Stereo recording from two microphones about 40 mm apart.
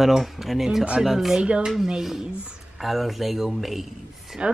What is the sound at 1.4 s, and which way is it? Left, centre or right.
Speech, right.